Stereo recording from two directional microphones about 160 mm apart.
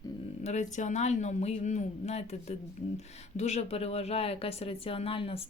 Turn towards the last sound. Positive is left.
turn(degrees=35)  # may be behind; listen again after turning